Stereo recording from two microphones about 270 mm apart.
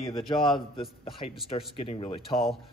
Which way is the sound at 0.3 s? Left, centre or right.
Centre.